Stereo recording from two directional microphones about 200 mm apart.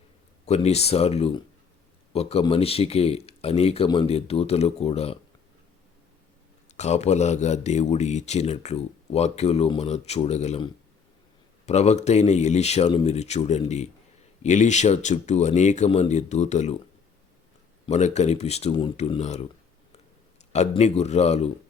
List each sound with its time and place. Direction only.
0.4 s speech: 30° left (ahead or behind)
6.7 s speech: 35° left (ahead or behind)
17.8 s speech: 35° left (ahead or behind)
20.5 s speech: 35° left (ahead or behind)